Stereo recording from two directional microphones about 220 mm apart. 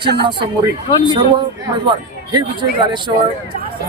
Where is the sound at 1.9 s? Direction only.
20° right (ahead or behind).